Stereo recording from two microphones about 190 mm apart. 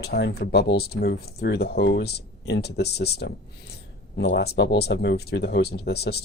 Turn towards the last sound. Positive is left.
turn(degrees=60)  # may be behind; listen again after turning